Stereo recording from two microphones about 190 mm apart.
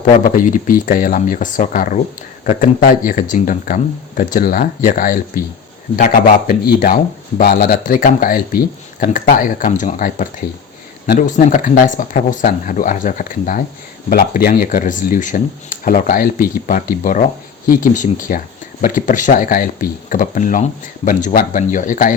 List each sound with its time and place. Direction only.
0.3 s speech: 45° left (ahead or behind)
6.5 s speech: 50° left (ahead or behind)